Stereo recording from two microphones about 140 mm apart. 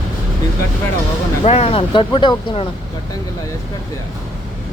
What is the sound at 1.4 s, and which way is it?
Speech, 45° left (ahead or behind).